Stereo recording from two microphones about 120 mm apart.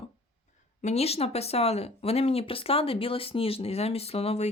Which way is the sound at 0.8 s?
65° left (ahead or behind).